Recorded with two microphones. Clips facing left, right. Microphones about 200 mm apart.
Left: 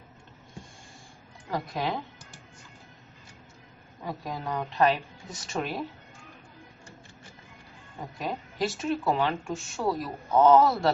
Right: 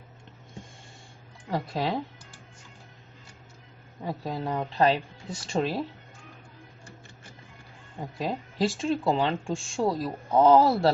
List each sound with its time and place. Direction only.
1.5 s speech: 30° right (ahead or behind)
4.0 s speech: 30° right (ahead or behind)
8.2 s speech: 30° right (ahead or behind)